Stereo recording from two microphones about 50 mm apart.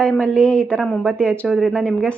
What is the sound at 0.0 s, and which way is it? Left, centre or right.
Speech, left.